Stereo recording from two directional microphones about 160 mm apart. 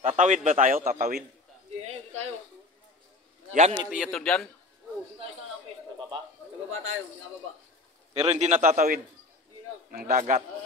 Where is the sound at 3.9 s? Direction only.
Centre (ahead or behind).